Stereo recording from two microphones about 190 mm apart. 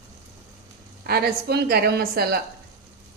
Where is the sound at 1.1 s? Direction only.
55° right (ahead or behind).